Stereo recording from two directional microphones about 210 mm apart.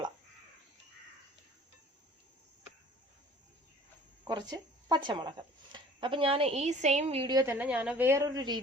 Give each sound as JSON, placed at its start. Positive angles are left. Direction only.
{"t": 4.2, "sound": "speech", "side_deg": -20}